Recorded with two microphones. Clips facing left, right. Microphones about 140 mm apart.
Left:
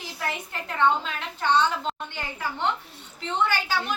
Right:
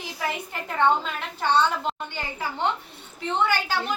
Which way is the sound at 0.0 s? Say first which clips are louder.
Right 2 dB; 15° right (ahead or behind).